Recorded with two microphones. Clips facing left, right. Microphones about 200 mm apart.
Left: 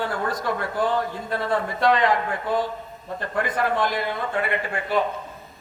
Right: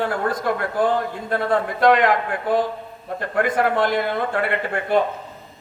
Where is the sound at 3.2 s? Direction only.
55° right (ahead or behind).